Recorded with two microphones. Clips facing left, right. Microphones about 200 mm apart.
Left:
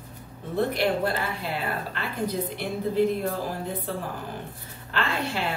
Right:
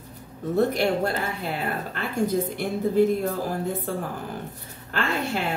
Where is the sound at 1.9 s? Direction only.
45° right (ahead or behind).